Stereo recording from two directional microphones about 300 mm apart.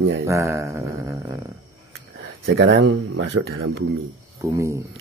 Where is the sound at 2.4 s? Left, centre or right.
Right.